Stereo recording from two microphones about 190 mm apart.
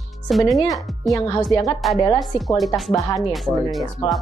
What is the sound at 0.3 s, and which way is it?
Speech, centre (ahead or behind).